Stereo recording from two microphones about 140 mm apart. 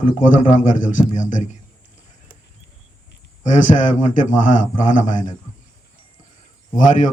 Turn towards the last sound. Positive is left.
turn(degrees=65)  # may be behind; listen again after turning